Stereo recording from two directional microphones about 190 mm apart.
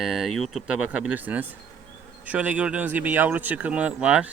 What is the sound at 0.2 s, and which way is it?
Speech, centre (ahead or behind).